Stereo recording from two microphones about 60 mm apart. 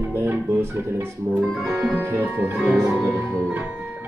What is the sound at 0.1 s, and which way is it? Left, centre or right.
Speech, right.